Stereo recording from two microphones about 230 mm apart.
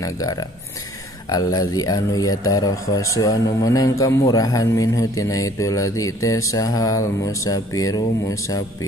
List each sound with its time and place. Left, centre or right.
0.0 s speech: centre